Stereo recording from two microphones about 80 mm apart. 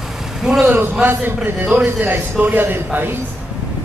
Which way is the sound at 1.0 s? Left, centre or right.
Right.